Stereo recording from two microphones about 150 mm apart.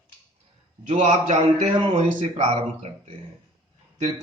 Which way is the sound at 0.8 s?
50° right (ahead or behind).